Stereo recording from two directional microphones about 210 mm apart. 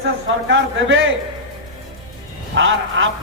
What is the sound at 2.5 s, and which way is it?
Speech, 65° right (ahead or behind).